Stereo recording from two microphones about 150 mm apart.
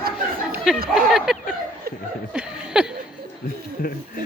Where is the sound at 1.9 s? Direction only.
90° right.